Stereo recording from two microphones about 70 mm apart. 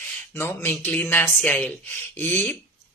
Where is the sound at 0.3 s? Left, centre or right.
Left.